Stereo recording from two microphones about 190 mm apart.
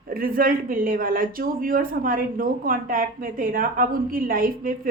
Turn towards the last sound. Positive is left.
turn(degrees=-50)  # may be behind; listen again after turning